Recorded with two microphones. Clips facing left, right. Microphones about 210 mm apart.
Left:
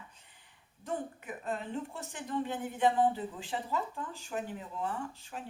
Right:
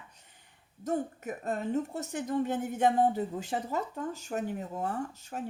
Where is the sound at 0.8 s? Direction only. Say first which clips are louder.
Right 6 dB; 45° right (ahead or behind).